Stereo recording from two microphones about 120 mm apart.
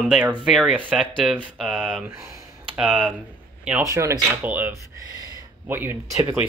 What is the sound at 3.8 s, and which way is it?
Speech, 25° right (ahead or behind).